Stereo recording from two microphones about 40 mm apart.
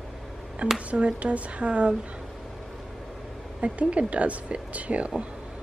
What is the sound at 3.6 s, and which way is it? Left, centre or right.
A woman's voice, right.